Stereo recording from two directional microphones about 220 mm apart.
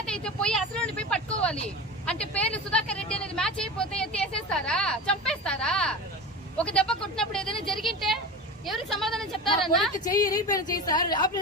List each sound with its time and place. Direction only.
0.0 s a woman's voice: 5° left (ahead or behind)
10.0 s a woman's voice: 15° left (ahead or behind)